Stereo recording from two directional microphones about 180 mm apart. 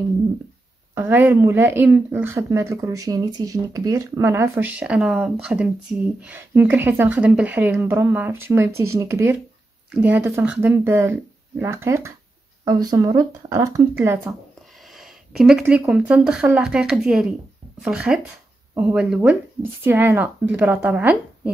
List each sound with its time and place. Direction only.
0.9 s speech: 10° right (ahead or behind)
14.9 s speech: centre (ahead or behind)